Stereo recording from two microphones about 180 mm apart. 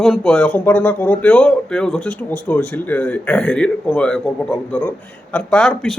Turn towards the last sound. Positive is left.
turn(degrees=5)  # may be behind; listen again after turning